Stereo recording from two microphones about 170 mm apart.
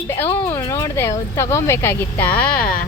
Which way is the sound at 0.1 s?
10° left (ahead or behind).